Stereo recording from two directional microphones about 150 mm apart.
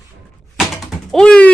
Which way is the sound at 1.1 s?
5° left (ahead or behind).